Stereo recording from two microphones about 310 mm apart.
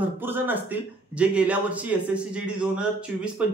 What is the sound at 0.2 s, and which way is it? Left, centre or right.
A man's voice, centre.